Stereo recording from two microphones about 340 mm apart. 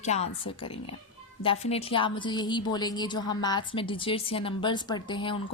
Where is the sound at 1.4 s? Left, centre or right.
Centre.